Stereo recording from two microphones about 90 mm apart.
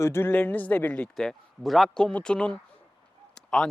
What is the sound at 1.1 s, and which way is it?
Speech, 5° left (ahead or behind).